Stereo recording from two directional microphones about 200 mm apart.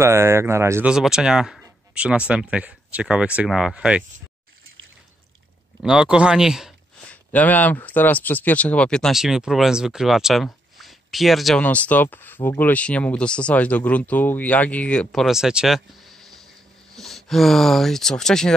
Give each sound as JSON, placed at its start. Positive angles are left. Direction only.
{"t": 0.0, "sound": "speech", "side_deg": -10}
{"t": 5.8, "sound": "speech", "side_deg": -5}
{"t": 7.3, "sound": "speech", "side_deg": 10}